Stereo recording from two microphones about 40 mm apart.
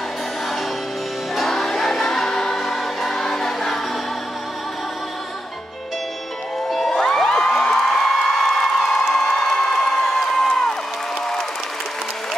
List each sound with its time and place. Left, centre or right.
1.5 s choir: centre
6.9 s music: centre
7.9 s crowd: centre
10.0 s music: centre